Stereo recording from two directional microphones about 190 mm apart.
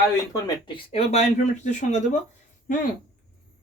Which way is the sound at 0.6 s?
30° left (ahead or behind).